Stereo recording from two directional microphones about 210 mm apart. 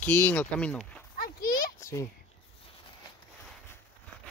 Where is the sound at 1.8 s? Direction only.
15° left (ahead or behind).